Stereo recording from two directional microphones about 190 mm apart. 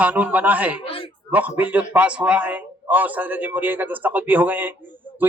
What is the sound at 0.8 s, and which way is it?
Speech, 30° left (ahead or behind).